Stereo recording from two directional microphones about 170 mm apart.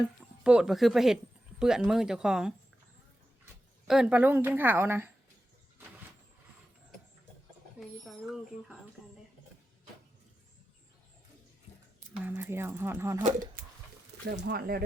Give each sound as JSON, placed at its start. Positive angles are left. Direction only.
{"t": 0.4, "sound": "speech", "side_deg": -5}
{"t": 3.8, "sound": "a woman's voice", "side_deg": -5}
{"t": 7.8, "sound": "speech", "side_deg": 0}
{"t": 12.1, "sound": "a woman's voice", "side_deg": -10}
{"t": 14.3, "sound": "speech", "side_deg": -70}